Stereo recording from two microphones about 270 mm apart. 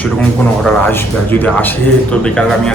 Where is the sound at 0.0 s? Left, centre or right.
Centre.